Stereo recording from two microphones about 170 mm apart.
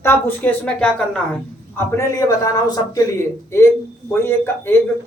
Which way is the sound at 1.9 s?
20° left (ahead or behind).